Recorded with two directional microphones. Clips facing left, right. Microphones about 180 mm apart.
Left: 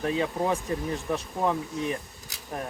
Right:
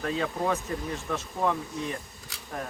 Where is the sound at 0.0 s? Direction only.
20° left (ahead or behind).